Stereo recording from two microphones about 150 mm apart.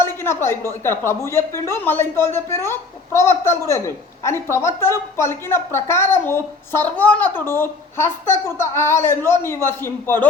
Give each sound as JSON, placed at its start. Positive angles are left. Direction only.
{"t": 0.0, "sound": "speech", "side_deg": 15}